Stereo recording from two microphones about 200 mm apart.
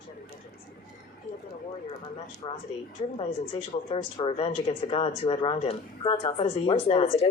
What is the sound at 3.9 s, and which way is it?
Speech, 30° left (ahead or behind).